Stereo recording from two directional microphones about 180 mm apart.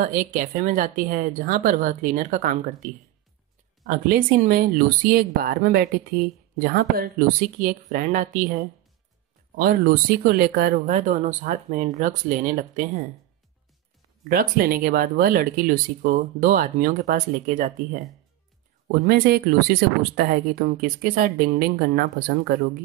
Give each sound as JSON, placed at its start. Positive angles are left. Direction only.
{"t": 0.0, "sound": "speech", "side_deg": -50}
{"t": 10.9, "sound": "speech", "side_deg": -45}
{"t": 14.3, "sound": "speech", "side_deg": -55}
{"t": 18.9, "sound": "speech", "side_deg": -55}